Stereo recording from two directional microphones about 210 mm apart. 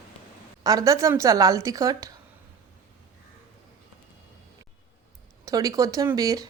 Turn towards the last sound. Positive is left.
turn(degrees=-15)  # may be behind; listen again after turning